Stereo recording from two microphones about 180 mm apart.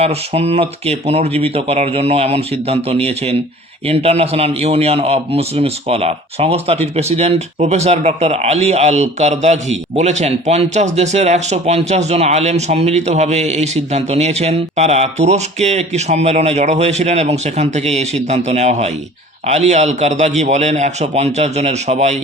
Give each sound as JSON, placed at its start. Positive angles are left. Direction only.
{"t": 0.0, "sound": "a man's voice", "side_deg": -35}